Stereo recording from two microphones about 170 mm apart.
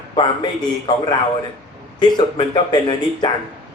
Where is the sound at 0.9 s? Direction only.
25° left (ahead or behind).